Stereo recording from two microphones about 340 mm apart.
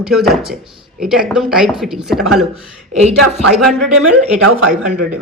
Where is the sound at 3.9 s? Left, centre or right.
Right.